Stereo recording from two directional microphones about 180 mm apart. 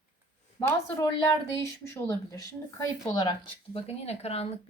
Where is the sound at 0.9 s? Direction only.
15° left (ahead or behind).